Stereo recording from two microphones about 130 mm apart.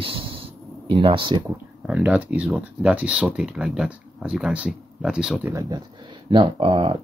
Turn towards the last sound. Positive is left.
turn(degrees=-40)  # may be behind; listen again after turning